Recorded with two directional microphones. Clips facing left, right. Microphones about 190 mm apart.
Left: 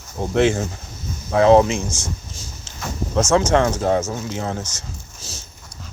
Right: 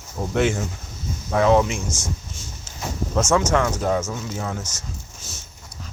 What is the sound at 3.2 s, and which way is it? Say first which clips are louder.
Speech: left 3 dB; 35° left (ahead or behind).